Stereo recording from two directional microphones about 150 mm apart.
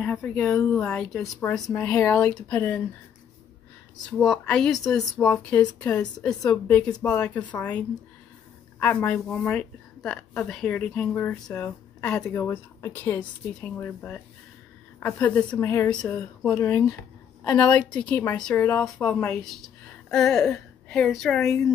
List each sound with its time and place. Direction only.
0.0 s speech: 5° left (ahead or behind)
4.0 s speech: centre (ahead or behind); by 13.2 s 20° left (ahead or behind)
13.2 s speech: 10° left (ahead or behind)
17.5 s speech: 10° left (ahead or behind)